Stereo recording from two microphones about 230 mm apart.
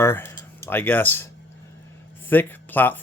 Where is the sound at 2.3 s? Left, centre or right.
Centre.